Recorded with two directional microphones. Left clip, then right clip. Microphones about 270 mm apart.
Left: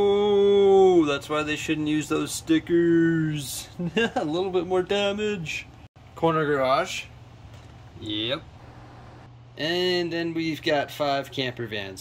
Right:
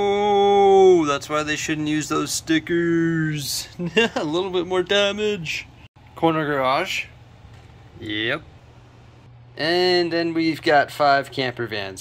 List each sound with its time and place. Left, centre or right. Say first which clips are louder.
0.0 s speech: right 2 dB; centre
8.0 s speech: right 4 dB; centre
9.6 s speech: right 6 dB; right
10.0 s speech: right 6 dB; centre